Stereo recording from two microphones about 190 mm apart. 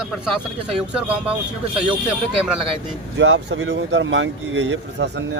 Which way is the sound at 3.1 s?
65° right (ahead or behind).